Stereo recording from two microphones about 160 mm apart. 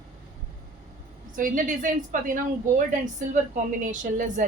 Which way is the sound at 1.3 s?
55° right (ahead or behind).